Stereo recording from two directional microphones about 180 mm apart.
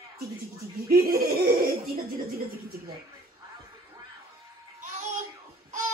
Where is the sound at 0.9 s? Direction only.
55° right (ahead or behind).